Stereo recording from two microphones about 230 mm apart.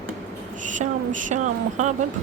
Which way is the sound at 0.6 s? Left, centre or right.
Right.